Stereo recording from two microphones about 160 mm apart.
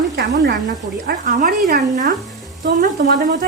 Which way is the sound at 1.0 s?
60° right (ahead or behind).